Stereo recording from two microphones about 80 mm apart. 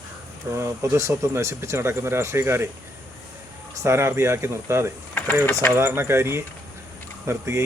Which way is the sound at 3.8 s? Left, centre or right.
Right.